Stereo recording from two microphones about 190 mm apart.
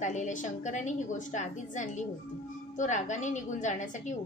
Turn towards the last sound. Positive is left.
turn(degrees=40)  # may be behind; listen again after turning